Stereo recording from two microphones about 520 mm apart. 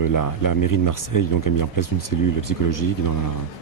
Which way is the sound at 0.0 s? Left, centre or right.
Left.